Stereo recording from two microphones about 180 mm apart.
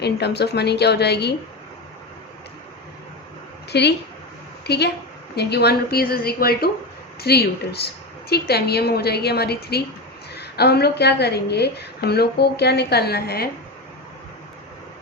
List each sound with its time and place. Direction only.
0.0 s a woman's voice: 65° left (ahead or behind)
3.7 s a woman's voice: 65° left (ahead or behind)